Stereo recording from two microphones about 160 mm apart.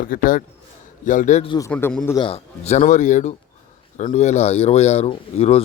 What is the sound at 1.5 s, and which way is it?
Speech, 20° left (ahead or behind).